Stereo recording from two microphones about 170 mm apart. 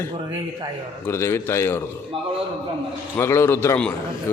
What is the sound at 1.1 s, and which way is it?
Speech, 15° left (ahead or behind).